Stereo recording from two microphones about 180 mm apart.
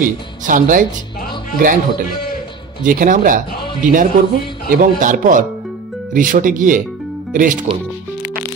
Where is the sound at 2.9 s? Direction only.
50° right (ahead or behind).